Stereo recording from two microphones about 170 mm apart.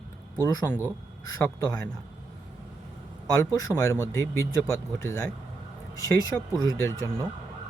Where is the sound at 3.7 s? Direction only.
10° right (ahead or behind).